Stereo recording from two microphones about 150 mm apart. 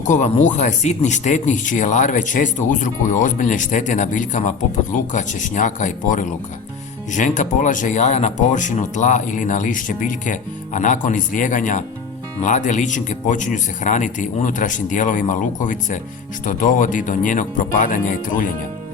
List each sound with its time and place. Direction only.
0.1 s speech: 55° left (ahead or behind)